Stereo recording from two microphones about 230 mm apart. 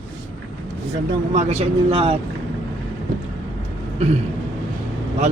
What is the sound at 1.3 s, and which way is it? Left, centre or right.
Speech, right.